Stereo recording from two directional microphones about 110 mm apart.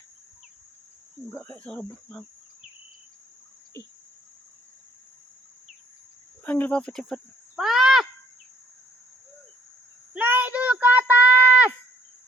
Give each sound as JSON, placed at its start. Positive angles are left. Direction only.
{"t": 1.3, "sound": "speech", "side_deg": 20}
{"t": 6.4, "sound": "speech", "side_deg": 15}
{"t": 10.2, "sound": "a sound", "side_deg": -15}